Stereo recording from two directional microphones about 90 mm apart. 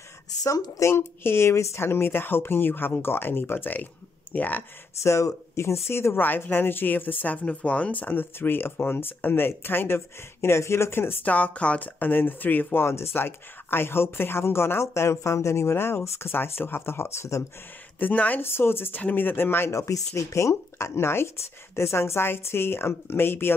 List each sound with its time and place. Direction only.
0.4 s speech: 40° left (ahead or behind); by 4.6 s 20° left (ahead or behind)
5.0 s speech: 30° left (ahead or behind)
17.9 s speech: 20° left (ahead or behind)